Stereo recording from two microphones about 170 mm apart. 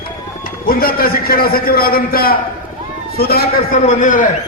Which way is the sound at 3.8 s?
50° left (ahead or behind).